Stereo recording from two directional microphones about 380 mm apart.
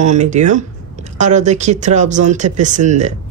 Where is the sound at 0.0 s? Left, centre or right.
Centre.